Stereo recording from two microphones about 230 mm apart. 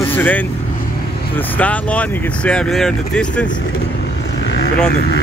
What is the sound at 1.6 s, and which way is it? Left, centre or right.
Speech, centre.